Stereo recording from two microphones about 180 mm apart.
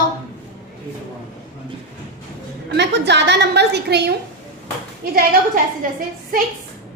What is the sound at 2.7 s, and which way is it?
A woman's voice, 70° right (ahead or behind).